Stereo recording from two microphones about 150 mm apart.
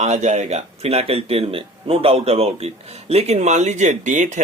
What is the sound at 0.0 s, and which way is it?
Speech, 50° right (ahead or behind).